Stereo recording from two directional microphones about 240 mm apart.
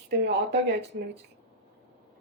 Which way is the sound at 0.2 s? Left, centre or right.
Right.